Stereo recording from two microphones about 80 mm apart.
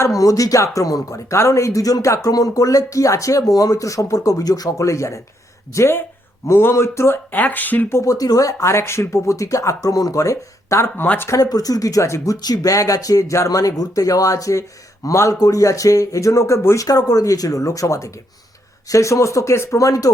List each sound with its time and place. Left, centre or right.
0.0 s speech: left
7.9 s speech: left
11.3 s speech: left